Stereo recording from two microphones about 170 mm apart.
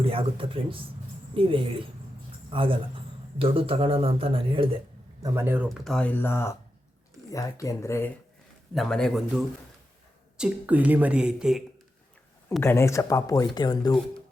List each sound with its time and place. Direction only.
0.0 s a man's voice: 30° right (ahead or behind)
5.2 s speech: 15° right (ahead or behind)
5.6 s speech: centre (ahead or behind)
8.7 s speech: centre (ahead or behind)
12.6 s speech: 15° left (ahead or behind)